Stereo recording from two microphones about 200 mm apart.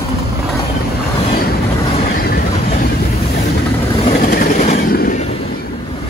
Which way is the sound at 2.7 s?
45° left (ahead or behind).